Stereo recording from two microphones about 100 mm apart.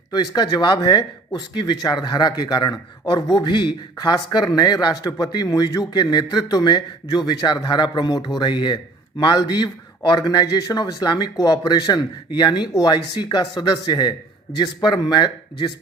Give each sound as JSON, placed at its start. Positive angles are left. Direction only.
{"t": 0.1, "sound": "a man's voice", "side_deg": 40}